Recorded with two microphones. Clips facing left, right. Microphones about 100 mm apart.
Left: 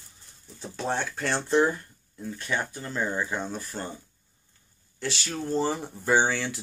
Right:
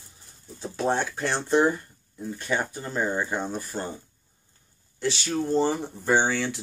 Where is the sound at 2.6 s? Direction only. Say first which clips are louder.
Right 2 dB; 20° right (ahead or behind).